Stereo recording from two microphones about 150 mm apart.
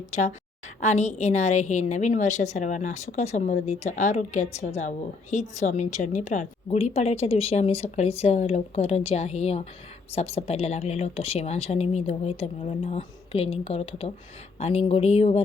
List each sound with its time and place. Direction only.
0.1 s a woman's voice: 50° left (ahead or behind)